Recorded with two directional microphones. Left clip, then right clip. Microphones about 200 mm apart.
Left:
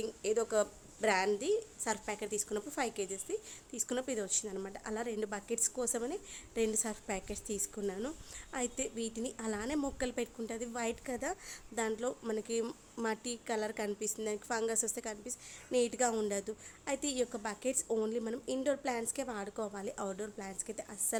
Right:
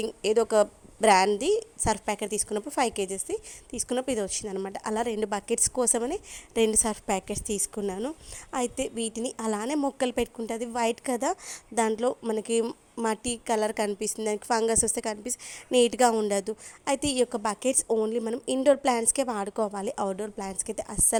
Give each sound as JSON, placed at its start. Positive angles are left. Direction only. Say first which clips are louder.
{"t": 0.0, "sound": "a woman's voice", "louder": "right 9 dB", "side_deg": -35}
{"t": 17.9, "sound": "a woman's voice", "louder": "right 8 dB", "side_deg": -25}